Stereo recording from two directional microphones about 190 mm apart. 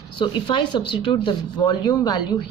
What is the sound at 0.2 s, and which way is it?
A woman's voice, 25° left (ahead or behind).